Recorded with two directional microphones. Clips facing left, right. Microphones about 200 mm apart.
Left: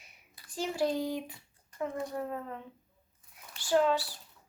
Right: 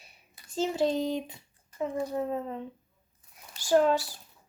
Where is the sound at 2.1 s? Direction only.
20° right (ahead or behind).